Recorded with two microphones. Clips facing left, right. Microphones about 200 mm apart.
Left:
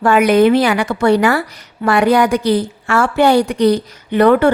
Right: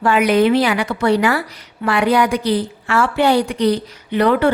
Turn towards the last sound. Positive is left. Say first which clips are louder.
# left 4 dB
turn(degrees=50)  # may be behind; listen again after turning